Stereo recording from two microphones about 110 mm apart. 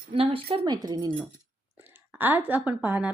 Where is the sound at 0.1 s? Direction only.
55° right (ahead or behind); by 1.1 s 40° right (ahead or behind).